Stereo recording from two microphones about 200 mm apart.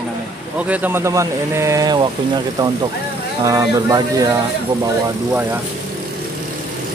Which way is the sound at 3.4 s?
15° right (ahead or behind).